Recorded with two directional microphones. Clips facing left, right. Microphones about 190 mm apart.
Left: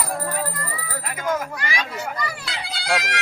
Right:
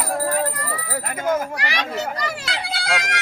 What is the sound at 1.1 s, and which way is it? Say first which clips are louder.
Speech: right 3 dB; 25° right (ahead or behind).